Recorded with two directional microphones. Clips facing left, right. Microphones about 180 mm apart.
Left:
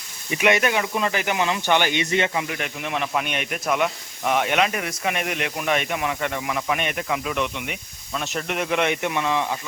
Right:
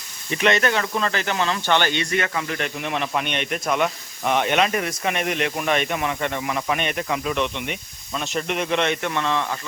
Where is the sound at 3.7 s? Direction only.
35° right (ahead or behind).